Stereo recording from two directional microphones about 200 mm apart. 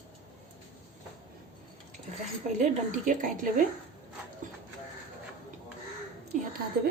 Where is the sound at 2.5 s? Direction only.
35° right (ahead or behind).